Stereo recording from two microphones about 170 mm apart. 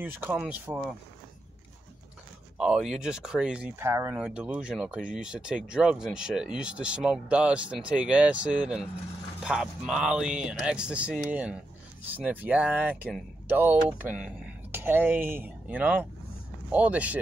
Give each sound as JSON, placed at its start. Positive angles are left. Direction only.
{"t": 0.0, "sound": "speech", "side_deg": -10}
{"t": 2.5, "sound": "speech", "side_deg": -5}
{"t": 4.2, "sound": "speech", "side_deg": -5}